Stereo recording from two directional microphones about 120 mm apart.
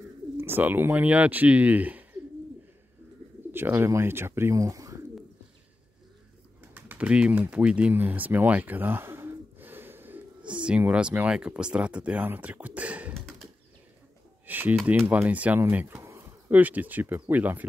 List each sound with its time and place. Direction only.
0.4 s speech: 15° right (ahead or behind)
3.5 s speech: 20° right (ahead or behind)
6.7 s speech: 10° right (ahead or behind)
14.4 s a sound: 15° right (ahead or behind)
14.9 s speech: 15° right (ahead or behind)